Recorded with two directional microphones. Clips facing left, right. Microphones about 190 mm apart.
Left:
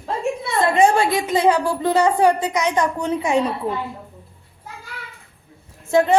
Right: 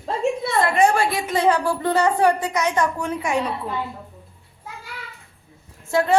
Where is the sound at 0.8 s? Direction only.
20° left (ahead or behind).